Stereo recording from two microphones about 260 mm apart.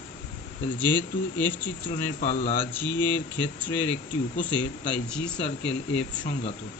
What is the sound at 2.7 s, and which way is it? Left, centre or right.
Speech, centre.